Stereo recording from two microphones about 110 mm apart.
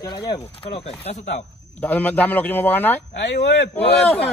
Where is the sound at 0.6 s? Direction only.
60° left (ahead or behind).